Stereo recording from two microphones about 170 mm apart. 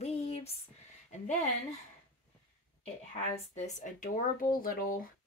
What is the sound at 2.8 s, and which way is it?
Speech, 45° left (ahead or behind).